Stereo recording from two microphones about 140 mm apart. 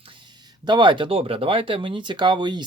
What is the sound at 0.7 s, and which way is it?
Speech, 35° right (ahead or behind).